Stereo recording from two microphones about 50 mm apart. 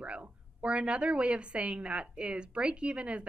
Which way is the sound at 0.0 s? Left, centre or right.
Right.